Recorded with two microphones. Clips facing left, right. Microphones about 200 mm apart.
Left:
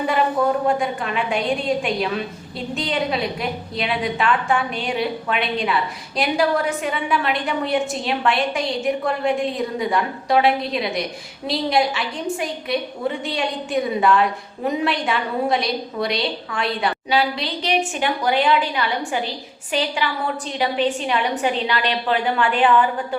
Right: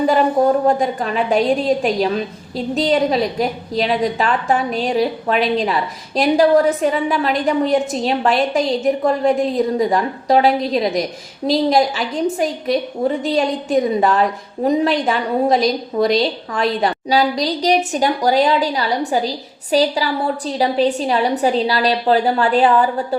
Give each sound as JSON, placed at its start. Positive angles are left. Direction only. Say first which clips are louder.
{"t": 0.1, "sound": "a woman's voice", "louder": "right 3 dB", "side_deg": -40}